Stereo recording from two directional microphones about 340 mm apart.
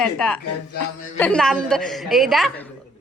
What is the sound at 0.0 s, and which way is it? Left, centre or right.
A woman's voice, centre.